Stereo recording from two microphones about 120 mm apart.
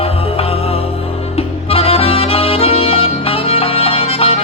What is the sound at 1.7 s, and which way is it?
Accordion, 55° left (ahead or behind).